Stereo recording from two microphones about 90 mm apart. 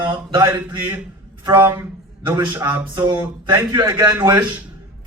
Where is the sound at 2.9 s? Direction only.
60° right (ahead or behind).